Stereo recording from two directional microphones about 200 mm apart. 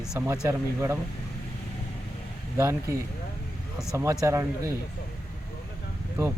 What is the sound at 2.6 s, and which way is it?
Speech, 15° right (ahead or behind).